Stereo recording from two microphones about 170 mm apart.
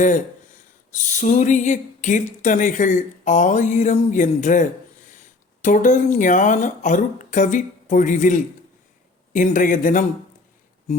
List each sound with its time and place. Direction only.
0.9 s speech: 45° left (ahead or behind)